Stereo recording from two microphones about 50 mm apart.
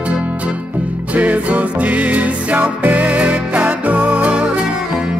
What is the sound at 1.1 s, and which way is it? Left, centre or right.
Music, right.